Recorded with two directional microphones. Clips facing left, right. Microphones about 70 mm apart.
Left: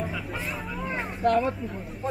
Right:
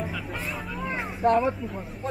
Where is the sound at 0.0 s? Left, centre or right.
Centre.